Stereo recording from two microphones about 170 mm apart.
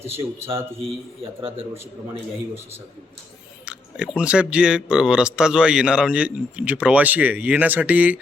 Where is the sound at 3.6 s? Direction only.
5° right (ahead or behind).